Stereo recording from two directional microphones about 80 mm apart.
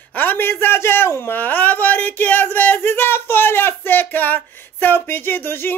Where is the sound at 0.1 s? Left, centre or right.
Left.